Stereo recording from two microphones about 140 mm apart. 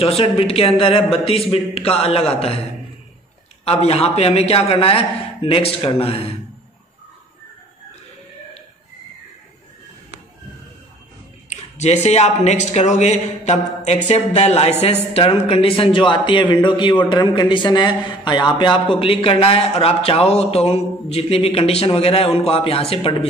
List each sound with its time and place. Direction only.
0.0 s a man's voice: 45° left (ahead or behind)
3.6 s a man's voice: 45° left (ahead or behind)
11.4 s a man's voice: 55° left (ahead or behind)